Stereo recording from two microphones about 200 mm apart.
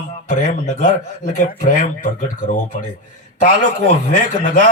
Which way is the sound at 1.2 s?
45° left (ahead or behind).